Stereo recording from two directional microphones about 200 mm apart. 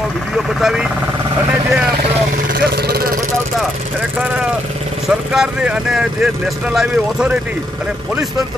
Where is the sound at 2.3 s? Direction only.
50° right (ahead or behind).